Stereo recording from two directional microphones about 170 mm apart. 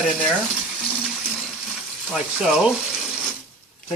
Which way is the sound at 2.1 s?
5° right (ahead or behind).